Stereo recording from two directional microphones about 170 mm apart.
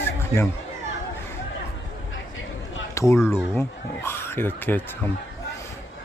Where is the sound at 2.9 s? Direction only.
15° left (ahead or behind).